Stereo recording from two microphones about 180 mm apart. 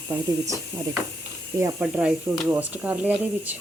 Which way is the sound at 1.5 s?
10° right (ahead or behind).